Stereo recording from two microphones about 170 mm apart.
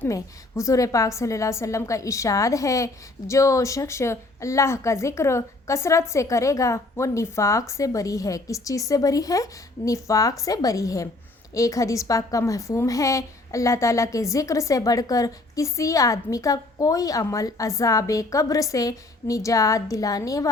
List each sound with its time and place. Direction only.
0.0 s a woman's voice: 15° left (ahead or behind)